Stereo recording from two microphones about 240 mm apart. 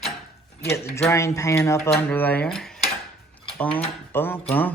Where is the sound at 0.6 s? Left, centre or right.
Centre.